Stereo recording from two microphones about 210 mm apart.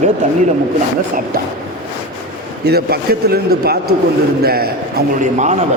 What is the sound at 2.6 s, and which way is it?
A man's voice, 50° right (ahead or behind).